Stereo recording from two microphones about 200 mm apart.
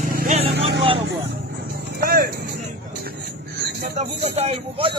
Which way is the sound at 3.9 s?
30° right (ahead or behind).